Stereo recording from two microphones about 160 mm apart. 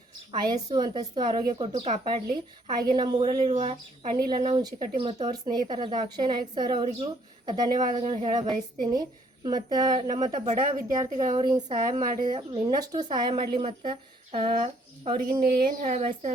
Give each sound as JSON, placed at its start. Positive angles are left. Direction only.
{"t": 0.3, "sound": "speech", "side_deg": -25}
{"t": 1.7, "sound": "speech", "side_deg": -45}
{"t": 2.0, "sound": "speech", "side_deg": -25}
{"t": 4.2, "sound": "speech", "side_deg": -25}
{"t": 7.9, "sound": "speech", "side_deg": -40}
{"t": 10.4, "sound": "speech", "side_deg": -55}
{"t": 11.3, "sound": "speech", "side_deg": -30}
{"t": 15.8, "sound": "speech", "side_deg": -45}